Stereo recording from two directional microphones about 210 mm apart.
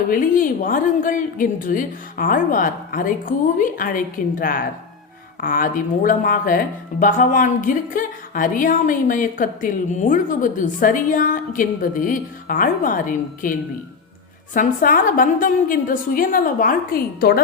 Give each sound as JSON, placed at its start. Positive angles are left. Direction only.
{"t": 0.1, "sound": "a woman's voice", "side_deg": 40}